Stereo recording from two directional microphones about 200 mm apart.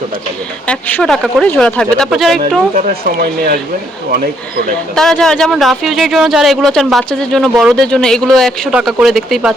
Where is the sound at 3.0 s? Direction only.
50° right (ahead or behind).